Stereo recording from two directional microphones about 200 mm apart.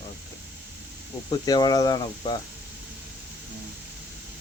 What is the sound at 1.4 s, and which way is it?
Speech, 20° left (ahead or behind).